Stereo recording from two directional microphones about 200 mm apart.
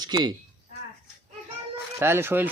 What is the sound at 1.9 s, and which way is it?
Speech, 10° right (ahead or behind).